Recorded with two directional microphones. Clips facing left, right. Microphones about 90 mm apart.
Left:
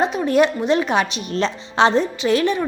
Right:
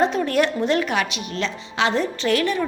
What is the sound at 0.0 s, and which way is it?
A woman's voice, 20° left (ahead or behind).